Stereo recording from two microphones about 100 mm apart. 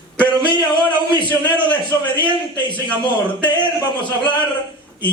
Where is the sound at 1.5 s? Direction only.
50° left (ahead or behind).